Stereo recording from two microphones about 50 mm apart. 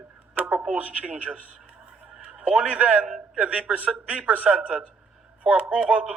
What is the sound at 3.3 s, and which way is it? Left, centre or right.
A woman's voice, right.